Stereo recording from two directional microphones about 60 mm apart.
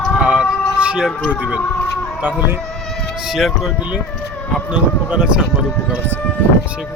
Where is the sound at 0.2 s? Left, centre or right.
Centre.